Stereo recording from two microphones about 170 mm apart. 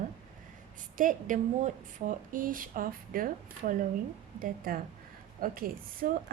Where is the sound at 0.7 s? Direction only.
50° right (ahead or behind).